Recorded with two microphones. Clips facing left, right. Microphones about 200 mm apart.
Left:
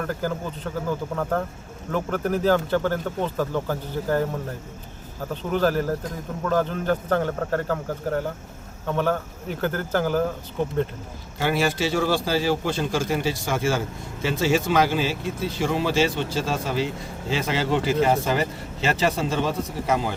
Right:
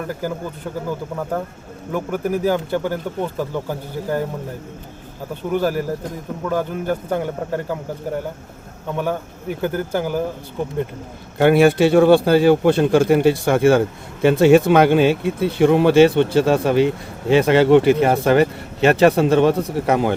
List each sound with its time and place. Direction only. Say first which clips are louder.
0.1 s speech: right 2 dB; 10° right (ahead or behind)
5.5 s speech: right 2 dB; 10° right (ahead or behind)
11.3 s a man's voice: right 10 dB; 60° right (ahead or behind)